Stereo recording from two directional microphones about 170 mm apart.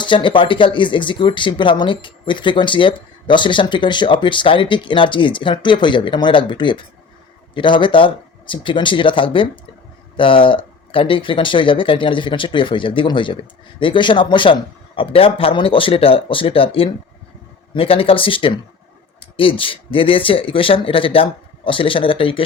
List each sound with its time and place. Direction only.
0.0 s speech: 30° left (ahead or behind)